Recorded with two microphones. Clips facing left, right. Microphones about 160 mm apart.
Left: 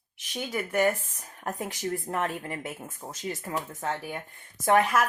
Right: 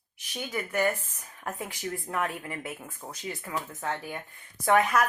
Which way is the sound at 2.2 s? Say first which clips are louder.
Left 1 dB; 25° left (ahead or behind).